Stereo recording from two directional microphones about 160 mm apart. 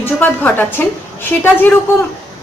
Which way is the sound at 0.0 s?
10° left (ahead or behind).